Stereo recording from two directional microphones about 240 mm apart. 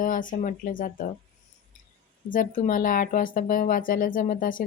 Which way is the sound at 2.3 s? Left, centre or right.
Left.